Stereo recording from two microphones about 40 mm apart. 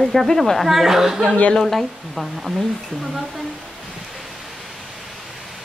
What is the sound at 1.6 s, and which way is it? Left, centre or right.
A woman's voice, centre.